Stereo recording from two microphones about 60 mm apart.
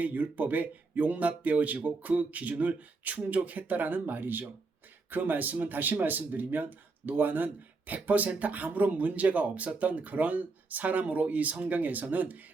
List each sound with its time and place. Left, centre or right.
0.0 s speech: right